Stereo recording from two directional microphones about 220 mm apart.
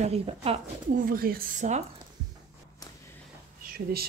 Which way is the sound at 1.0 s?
40° right (ahead or behind).